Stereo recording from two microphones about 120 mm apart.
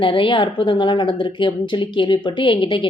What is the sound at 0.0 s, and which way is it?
A woman's voice, 45° left (ahead or behind).